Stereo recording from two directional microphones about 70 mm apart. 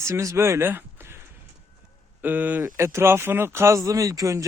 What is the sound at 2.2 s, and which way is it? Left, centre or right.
Speech, right.